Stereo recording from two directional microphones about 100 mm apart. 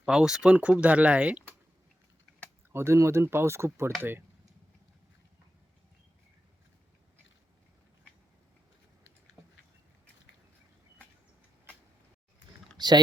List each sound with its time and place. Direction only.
0.0 s speech: 5° right (ahead or behind)
2.7 s speech: 25° right (ahead or behind)
12.7 s typing: 45° right (ahead or behind)